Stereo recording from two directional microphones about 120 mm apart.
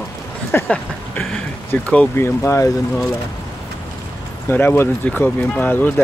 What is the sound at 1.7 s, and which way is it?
Speech, 15° left (ahead or behind).